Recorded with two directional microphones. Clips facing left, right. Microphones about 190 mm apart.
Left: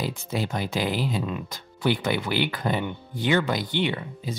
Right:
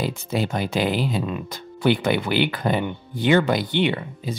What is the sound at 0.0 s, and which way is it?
Speech, 65° right (ahead or behind).